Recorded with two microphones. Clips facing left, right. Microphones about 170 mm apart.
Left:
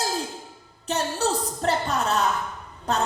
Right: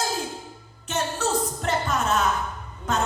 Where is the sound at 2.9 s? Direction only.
35° left (ahead or behind).